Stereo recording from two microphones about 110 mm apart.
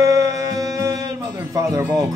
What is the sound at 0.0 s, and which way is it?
Music, 30° right (ahead or behind).